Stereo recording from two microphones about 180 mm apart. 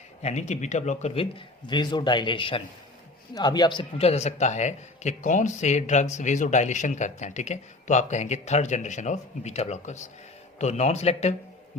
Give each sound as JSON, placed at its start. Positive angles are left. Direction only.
{"t": 0.2, "sound": "a man's voice", "side_deg": 40}